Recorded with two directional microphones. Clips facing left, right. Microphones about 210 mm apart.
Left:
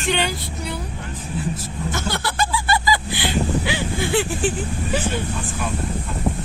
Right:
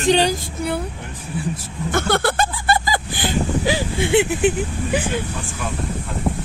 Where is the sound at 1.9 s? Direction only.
55° right (ahead or behind).